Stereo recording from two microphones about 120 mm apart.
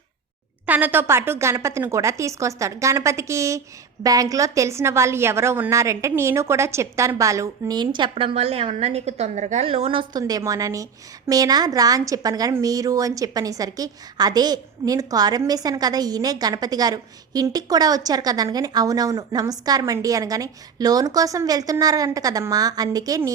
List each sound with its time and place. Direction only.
0.6 s a woman's voice: 15° right (ahead or behind); by 23.3 s 30° right (ahead or behind)